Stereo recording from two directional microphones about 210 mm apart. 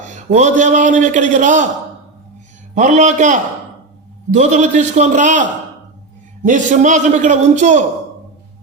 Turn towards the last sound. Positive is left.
turn(degrees=-35)  # may be behind; listen again after turning